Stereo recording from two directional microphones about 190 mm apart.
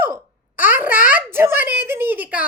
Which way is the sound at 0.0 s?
10° right (ahead or behind).